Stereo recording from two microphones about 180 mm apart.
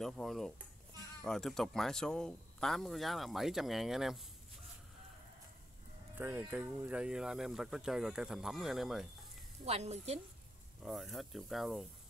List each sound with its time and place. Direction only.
0.0 s speech: centre (ahead or behind)
6.1 s speech: 10° right (ahead or behind)
9.7 s a woman's voice: 35° right (ahead or behind)
10.8 s speech: centre (ahead or behind)